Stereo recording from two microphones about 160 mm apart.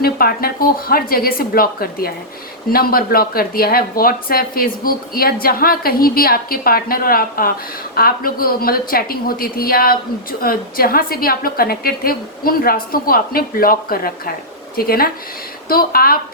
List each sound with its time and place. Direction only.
0.0 s speech: 70° left (ahead or behind)